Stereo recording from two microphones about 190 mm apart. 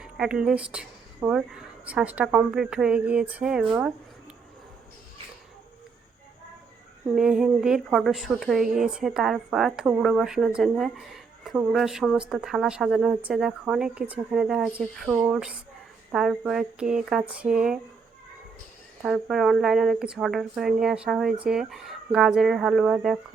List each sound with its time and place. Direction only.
0.0 s speech: 5° right (ahead or behind)
7.2 s speech: 5° right (ahead or behind)
19.0 s speech: centre (ahead or behind)